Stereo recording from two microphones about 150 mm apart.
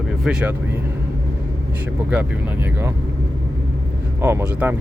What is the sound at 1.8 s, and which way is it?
Speech, 10° right (ahead or behind).